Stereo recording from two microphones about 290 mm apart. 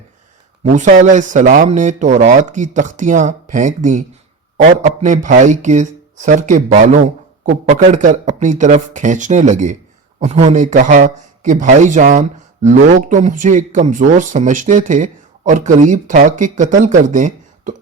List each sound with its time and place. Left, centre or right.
0.6 s a man's voice: right